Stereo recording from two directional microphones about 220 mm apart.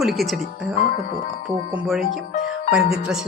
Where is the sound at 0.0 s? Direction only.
Centre (ahead or behind).